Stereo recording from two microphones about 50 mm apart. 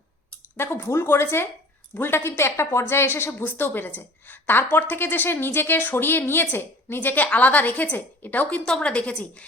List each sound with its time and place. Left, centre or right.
0.5 s a woman's voice: left